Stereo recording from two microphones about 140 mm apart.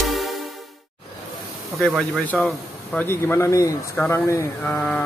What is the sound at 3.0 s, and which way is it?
Speech, 15° left (ahead or behind).